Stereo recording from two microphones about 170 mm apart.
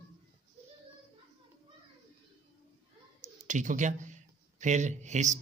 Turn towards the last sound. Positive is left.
turn(degrees=-45)  # may be behind; listen again after turning